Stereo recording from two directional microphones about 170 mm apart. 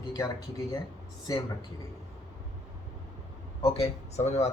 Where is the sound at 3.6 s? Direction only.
35° left (ahead or behind).